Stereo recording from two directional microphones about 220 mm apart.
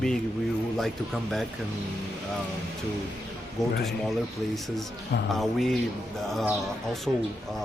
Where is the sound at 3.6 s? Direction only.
Centre (ahead or behind).